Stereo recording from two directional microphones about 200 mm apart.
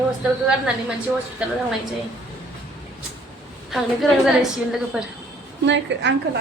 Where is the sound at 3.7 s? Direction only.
Centre (ahead or behind).